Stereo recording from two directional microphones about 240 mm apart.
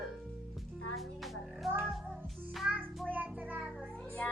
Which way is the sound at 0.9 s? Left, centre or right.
Centre.